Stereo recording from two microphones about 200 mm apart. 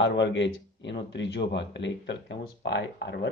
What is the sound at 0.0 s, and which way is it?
Speech, 65° left (ahead or behind).